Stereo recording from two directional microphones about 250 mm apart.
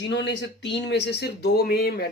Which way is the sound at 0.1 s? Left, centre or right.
Left.